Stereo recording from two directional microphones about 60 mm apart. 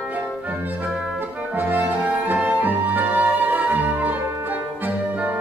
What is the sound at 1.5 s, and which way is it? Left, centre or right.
Music, right.